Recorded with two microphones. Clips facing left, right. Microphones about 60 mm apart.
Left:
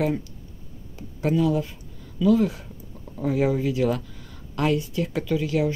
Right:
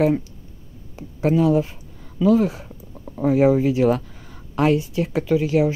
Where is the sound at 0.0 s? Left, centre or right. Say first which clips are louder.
Right 6 dB; right.